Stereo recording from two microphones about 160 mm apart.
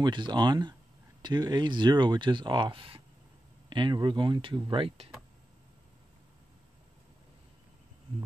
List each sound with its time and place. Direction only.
0.0 s speech: 30° right (ahead or behind)